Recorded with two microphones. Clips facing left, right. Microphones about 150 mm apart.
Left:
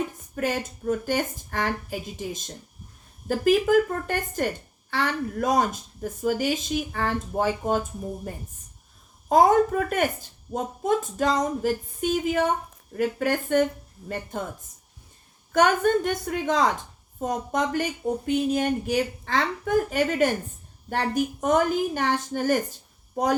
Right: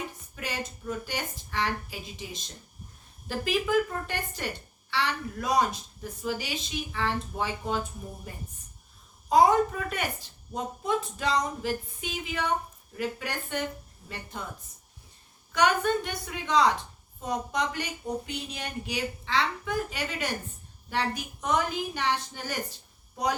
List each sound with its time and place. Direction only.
0.3 s a woman's voice: 50° left (ahead or behind)
15.5 s a woman's voice: 45° left (ahead or behind)